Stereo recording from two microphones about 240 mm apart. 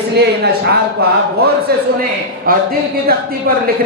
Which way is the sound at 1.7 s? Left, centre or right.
Right.